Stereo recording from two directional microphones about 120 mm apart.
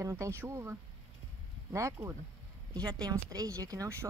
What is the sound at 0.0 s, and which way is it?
Speech, 25° right (ahead or behind).